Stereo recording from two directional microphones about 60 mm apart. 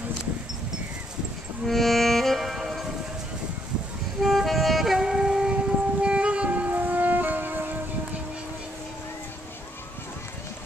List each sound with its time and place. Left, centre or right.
1.7 s music: centre
4.2 s wind instrument: centre; by 7.7 s right